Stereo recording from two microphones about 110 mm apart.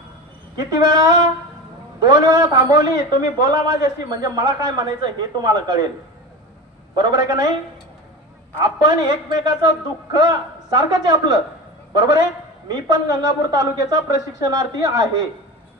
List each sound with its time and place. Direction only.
0.6 s a man's voice: 40° right (ahead or behind)
7.0 s a man's voice: 40° right (ahead or behind)
8.7 s a man's voice: 40° right (ahead or behind)